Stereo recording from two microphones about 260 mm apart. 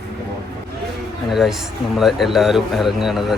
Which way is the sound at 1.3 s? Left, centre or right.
Centre.